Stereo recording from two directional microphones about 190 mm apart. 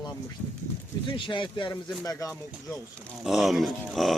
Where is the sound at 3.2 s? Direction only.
Centre (ahead or behind).